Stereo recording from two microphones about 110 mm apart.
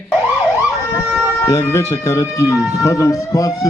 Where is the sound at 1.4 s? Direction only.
25° left (ahead or behind).